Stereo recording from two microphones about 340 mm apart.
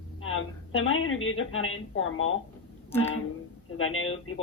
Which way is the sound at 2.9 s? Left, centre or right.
Centre.